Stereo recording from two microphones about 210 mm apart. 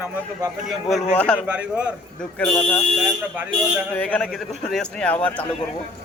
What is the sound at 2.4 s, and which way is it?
A man's voice, 5° left (ahead or behind).